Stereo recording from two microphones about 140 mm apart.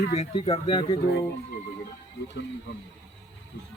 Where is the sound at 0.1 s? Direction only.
45° left (ahead or behind).